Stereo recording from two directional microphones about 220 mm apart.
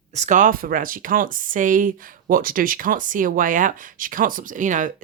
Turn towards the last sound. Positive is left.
turn(degrees=-35)  # may be behind; listen again after turning